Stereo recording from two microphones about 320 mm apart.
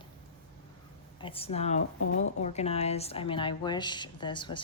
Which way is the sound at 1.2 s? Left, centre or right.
Centre.